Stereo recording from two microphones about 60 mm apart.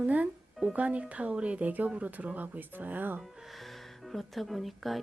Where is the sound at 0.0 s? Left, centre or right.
Right.